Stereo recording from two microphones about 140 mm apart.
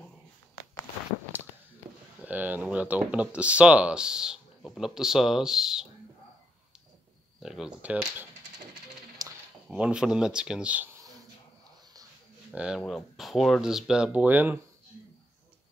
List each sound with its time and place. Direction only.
2.1 s speech: 10° right (ahead or behind)
7.4 s speech: 5° right (ahead or behind)
9.2 s a sound: 25° right (ahead or behind)
9.7 s speech: 5° right (ahead or behind)
12.5 s speech: 5° right (ahead or behind)